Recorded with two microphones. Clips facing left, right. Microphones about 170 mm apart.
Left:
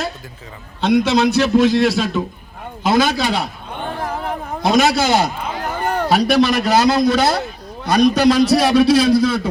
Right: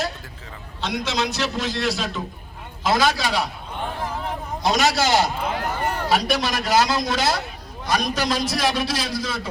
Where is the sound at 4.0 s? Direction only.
55° left (ahead or behind).